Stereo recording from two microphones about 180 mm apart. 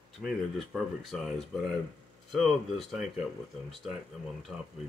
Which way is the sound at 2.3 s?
Centre (ahead or behind).